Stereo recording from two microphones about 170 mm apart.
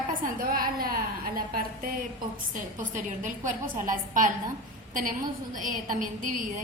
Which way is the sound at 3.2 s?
50° right (ahead or behind).